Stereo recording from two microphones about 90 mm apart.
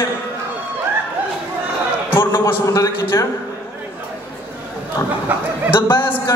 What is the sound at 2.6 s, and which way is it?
Speech, 35° left (ahead or behind).